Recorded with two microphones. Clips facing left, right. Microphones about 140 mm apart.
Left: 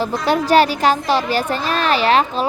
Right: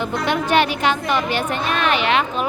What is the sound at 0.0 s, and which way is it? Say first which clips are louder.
A woman's voice: left 3 dB; 35° left (ahead or behind).